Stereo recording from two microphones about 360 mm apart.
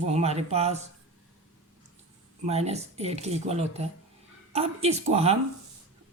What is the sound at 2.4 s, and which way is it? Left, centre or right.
Speech, centre.